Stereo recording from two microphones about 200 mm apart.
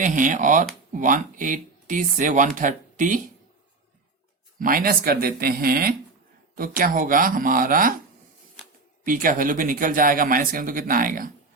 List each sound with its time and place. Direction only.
0.0 s speech: 40° right (ahead or behind)
4.6 s speech: 45° right (ahead or behind)
9.0 s speech: 45° right (ahead or behind)